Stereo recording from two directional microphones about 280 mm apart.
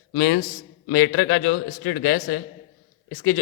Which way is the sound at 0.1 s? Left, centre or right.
Left.